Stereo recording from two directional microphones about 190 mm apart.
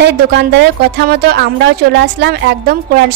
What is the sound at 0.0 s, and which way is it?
Speech, 65° right (ahead or behind).